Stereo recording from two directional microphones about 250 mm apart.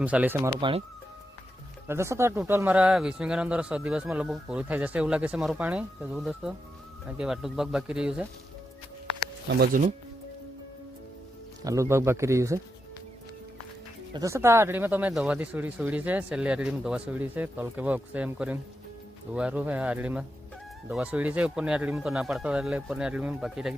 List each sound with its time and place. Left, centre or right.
0.0 s speech: centre
1.9 s speech: centre
9.5 s speech: right
11.6 s speech: centre
14.1 s speech: centre